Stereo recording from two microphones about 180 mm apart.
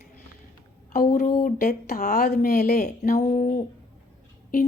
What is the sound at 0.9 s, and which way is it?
Speech, 50° left (ahead or behind).